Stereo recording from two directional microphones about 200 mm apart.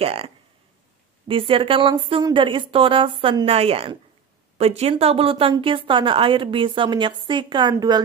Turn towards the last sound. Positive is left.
turn(degrees=-20)  # may be behind; listen again after turning